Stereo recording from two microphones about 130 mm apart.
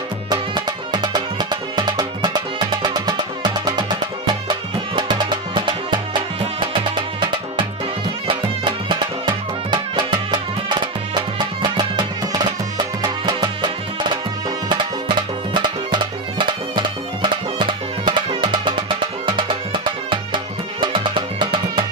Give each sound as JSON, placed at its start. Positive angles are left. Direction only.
{"t": 0.3, "sound": "music", "side_deg": -35}
{"t": 8.8, "sound": "music", "side_deg": -35}
{"t": 15.5, "sound": "music", "side_deg": -35}